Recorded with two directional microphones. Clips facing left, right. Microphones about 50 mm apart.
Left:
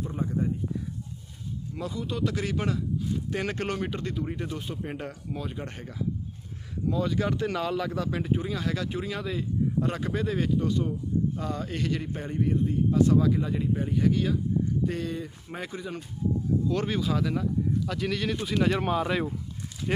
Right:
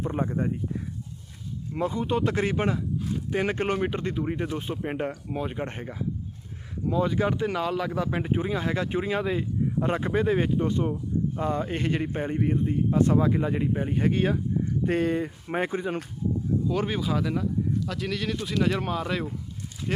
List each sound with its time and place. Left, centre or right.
0.0 s speech: right
1.7 s speech: right
16.6 s speech: centre